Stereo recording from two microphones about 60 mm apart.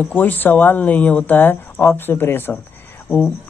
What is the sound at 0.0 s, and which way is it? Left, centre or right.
Speech, left.